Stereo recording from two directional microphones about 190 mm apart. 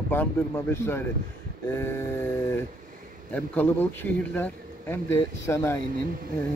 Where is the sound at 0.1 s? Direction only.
10° left (ahead or behind).